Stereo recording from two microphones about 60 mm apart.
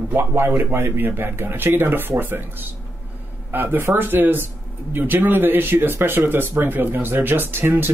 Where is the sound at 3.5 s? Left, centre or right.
Right.